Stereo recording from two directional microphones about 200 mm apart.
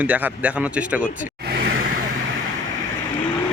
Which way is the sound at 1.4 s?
50° right (ahead or behind).